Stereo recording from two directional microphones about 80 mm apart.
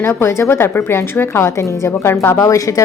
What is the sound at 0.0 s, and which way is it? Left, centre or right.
A woman's voice, left.